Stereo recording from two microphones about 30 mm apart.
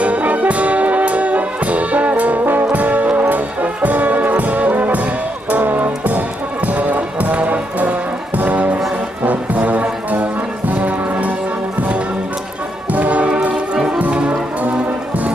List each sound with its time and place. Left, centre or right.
0.0 s music: right
9.2 s brass instrument: right
10.8 s music: right
12.9 s music: right